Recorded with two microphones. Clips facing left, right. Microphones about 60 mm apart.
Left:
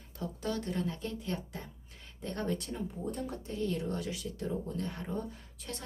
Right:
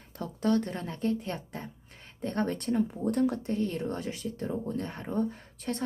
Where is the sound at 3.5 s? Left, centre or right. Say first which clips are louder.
Right 4 dB; right.